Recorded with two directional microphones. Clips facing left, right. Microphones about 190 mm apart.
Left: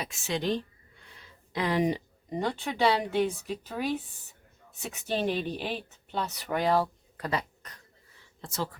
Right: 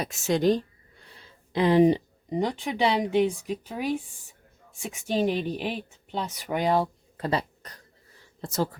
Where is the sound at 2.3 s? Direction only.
15° right (ahead or behind).